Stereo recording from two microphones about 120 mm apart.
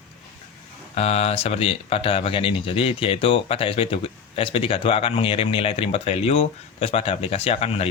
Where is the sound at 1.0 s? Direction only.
60° left (ahead or behind).